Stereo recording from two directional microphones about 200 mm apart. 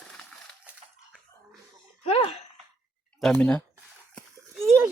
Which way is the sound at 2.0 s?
30° left (ahead or behind).